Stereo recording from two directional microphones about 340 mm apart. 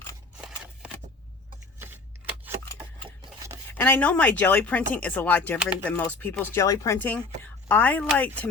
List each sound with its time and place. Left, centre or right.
0.3 s scissors: centre
3.2 s a sound: centre
3.7 s speech: centre